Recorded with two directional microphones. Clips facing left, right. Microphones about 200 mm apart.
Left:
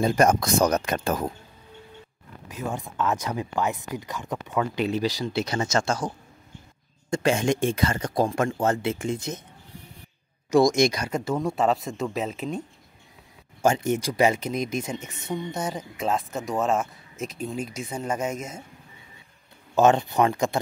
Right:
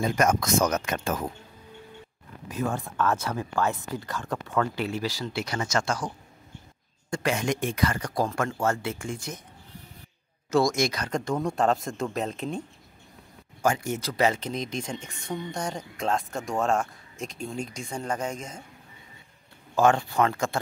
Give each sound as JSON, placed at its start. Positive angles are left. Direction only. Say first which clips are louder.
{"t": 0.0, "sound": "speech", "louder": "left 4 dB", "side_deg": 30}
{"t": 2.5, "sound": "speech", "louder": "right 2 dB", "side_deg": 20}
{"t": 10.5, "sound": "speech", "louder": "left 4 dB", "side_deg": 15}
{"t": 13.6, "sound": "speech", "louder": "left 4 dB", "side_deg": 25}
{"t": 19.7, "sound": "speech", "louder": "left 3 dB", "side_deg": 20}